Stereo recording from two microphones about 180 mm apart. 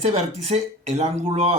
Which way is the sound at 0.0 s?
40° right (ahead or behind).